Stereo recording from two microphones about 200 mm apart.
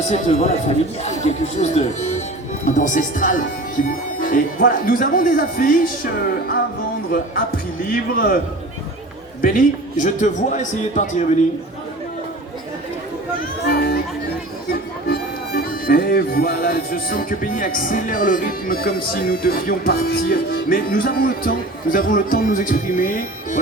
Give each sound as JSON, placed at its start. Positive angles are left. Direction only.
{"t": 0.1, "sound": "a man's voice", "side_deg": 35}
{"t": 3.8, "sound": "music", "side_deg": 45}
{"t": 9.4, "sound": "a man's voice", "side_deg": 45}
{"t": 13.7, "sound": "music", "side_deg": 50}
{"t": 15.0, "sound": "music", "side_deg": 50}